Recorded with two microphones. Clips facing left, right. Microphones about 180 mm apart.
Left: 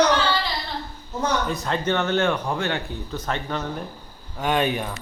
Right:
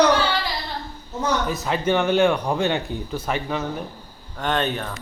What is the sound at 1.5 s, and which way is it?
Speech, 5° right (ahead or behind).